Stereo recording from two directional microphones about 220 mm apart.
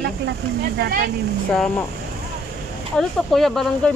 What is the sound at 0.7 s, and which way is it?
Speech, 45° right (ahead or behind).